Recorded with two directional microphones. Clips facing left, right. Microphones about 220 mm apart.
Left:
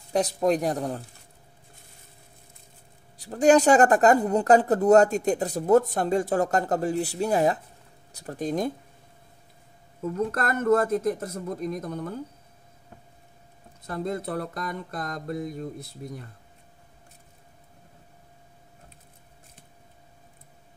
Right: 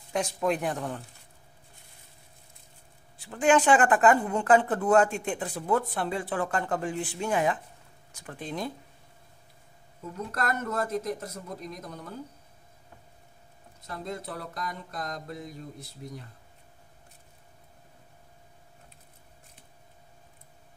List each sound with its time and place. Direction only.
0.1 s speech: 35° left (ahead or behind)
3.2 s speech: 40° left (ahead or behind)
10.3 s speech: 50° left (ahead or behind)
13.8 s speech: 50° left (ahead or behind)